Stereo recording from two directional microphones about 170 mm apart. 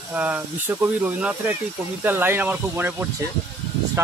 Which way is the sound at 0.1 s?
10° right (ahead or behind).